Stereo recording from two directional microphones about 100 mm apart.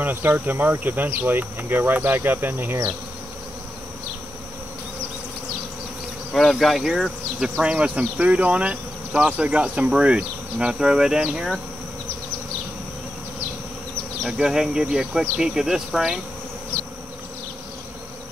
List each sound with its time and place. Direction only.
0.0 s speech: 20° right (ahead or behind)
6.3 s speech: centre (ahead or behind)
14.2 s speech: 5° right (ahead or behind)